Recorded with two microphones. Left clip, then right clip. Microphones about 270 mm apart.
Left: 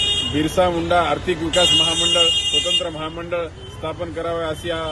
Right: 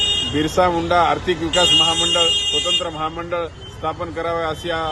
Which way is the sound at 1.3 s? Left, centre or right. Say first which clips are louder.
Right 1 dB; right.